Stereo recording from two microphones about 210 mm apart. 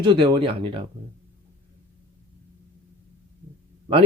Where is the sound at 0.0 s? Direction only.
25° right (ahead or behind).